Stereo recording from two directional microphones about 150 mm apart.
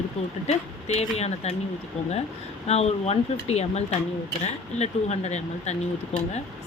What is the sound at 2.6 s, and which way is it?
Speech, 45° left (ahead or behind).